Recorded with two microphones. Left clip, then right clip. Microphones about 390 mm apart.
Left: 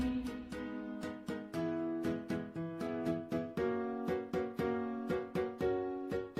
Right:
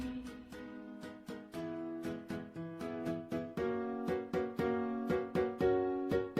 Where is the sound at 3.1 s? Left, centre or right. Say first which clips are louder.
Left 2 dB; centre.